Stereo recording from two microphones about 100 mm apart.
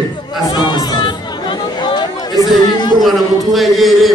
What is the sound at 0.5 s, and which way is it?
Chatter, 45° left (ahead or behind).